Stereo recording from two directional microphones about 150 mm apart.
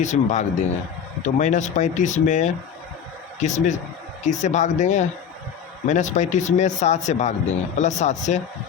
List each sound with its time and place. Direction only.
0.0 s speech: 50° left (ahead or behind)